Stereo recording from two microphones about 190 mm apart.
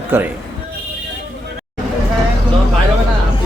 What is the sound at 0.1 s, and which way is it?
Speech, 10° right (ahead or behind).